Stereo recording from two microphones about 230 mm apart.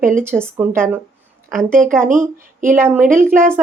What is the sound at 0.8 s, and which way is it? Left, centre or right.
Speech, centre.